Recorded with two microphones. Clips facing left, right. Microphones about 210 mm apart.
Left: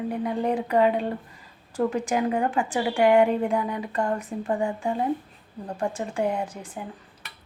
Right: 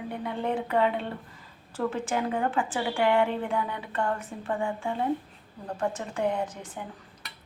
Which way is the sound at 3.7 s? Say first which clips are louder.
Left 5 dB; 40° left (ahead or behind).